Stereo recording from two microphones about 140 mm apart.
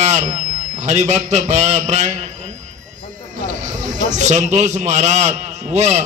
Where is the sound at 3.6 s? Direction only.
60° right (ahead or behind).